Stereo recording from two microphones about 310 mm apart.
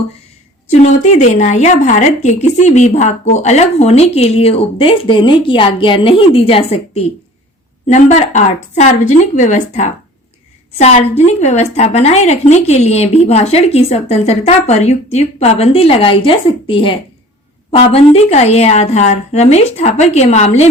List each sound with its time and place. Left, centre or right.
0.7 s speech: left